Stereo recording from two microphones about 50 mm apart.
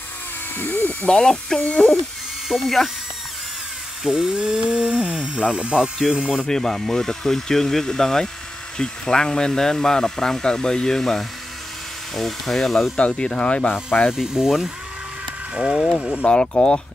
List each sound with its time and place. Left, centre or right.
0.6 s speech: left
1.0 s speech: centre
2.4 s speech: centre
4.0 s speech: centre
6.4 s speech: centre
12.9 s speech: left
14.1 s speech: centre
15.8 s speech: centre
16.3 s speech: centre